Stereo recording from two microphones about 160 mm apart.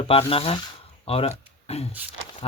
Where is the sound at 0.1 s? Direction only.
35° left (ahead or behind).